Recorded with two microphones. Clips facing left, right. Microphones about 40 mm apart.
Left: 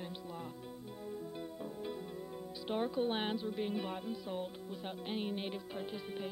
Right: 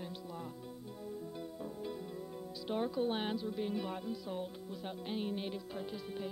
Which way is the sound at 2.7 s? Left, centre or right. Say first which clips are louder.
Even; centre.